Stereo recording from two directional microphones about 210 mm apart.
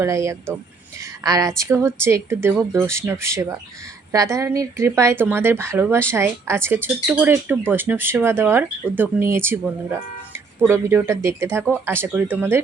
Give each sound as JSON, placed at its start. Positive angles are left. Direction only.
{"t": 0.0, "sound": "speech", "side_deg": -15}